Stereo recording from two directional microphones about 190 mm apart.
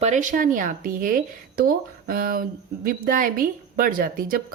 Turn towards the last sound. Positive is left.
turn(degrees=-50)  # may be behind; listen again after turning